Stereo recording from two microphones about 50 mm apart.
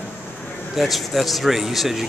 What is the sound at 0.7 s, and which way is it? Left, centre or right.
A man's voice, centre.